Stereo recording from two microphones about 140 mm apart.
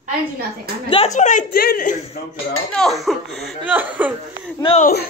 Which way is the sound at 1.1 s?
65° left (ahead or behind).